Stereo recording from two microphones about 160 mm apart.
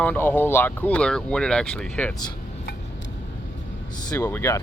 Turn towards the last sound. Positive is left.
turn(degrees=15)  # may be behind; listen again after turning